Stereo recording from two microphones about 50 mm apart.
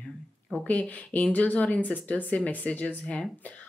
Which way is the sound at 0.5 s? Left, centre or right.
Left.